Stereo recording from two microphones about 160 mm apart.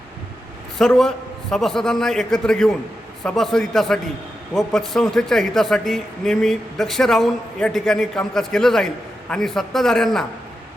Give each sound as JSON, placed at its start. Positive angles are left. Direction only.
{"t": 0.9, "sound": "speech", "side_deg": 0}